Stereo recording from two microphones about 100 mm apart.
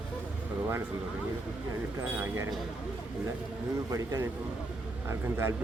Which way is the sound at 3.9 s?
35° right (ahead or behind).